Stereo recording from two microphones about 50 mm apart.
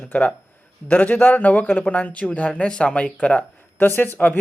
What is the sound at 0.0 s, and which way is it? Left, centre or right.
Speech, left.